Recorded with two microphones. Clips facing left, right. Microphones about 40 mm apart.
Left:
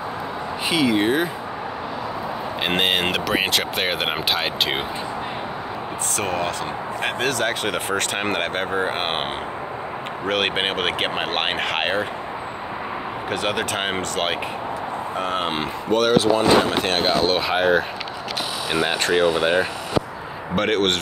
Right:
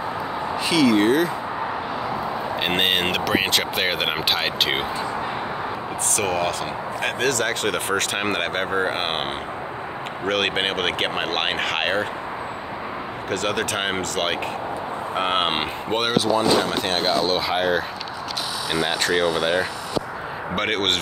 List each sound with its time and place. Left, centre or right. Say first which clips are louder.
0.7 s speech: right 2 dB; centre
2.6 s speech: left 1 dB; centre
6.1 s speech: right 1 dB; centre
10.2 s speech: even; centre
13.3 s speech: even; centre
13.7 s speech: even; centre
15.1 s speech: right 3 dB; right
16.3 s speech: left 2 dB; left
18.7 s speech: left 1 dB; left
20.5 s speech: left 3 dB; centre